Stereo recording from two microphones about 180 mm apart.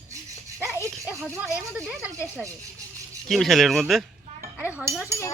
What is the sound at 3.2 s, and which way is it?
Speech, centre (ahead or behind).